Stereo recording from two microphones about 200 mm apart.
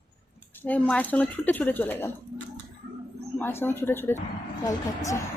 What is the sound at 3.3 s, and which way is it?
Speech, 10° left (ahead or behind).